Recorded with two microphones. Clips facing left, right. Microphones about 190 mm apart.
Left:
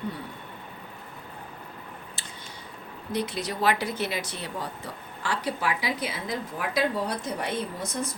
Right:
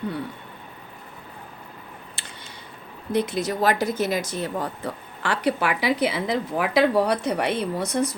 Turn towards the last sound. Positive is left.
turn(degrees=-70)  # may be behind; listen again after turning